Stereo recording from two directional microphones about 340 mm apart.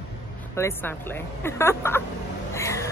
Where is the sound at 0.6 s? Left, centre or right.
Centre.